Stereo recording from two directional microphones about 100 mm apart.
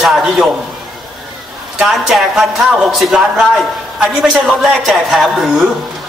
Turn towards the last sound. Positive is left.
turn(degrees=-5)  # may be behind; listen again after turning